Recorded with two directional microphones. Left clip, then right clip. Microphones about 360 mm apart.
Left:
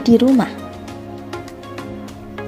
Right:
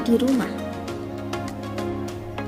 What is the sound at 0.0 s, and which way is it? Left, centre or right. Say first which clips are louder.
Speech: left 7 dB; centre.